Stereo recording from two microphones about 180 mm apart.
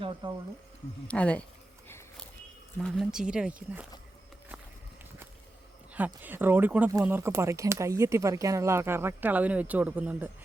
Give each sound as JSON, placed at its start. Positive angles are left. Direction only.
{"t": 0.0, "sound": "speech", "side_deg": -25}
{"t": 1.0, "sound": "speech", "side_deg": 5}
{"t": 2.7, "sound": "speech", "side_deg": 5}
{"t": 6.2, "sound": "speech", "side_deg": -10}